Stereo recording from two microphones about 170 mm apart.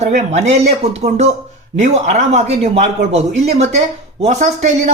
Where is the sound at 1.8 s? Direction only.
40° right (ahead or behind).